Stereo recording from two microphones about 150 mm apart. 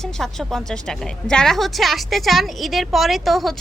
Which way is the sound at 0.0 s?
Centre (ahead or behind).